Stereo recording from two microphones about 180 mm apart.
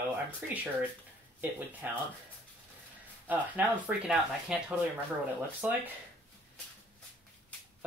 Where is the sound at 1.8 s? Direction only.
10° right (ahead or behind).